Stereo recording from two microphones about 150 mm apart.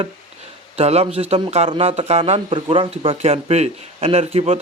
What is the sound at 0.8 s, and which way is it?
A man's voice, 45° right (ahead or behind).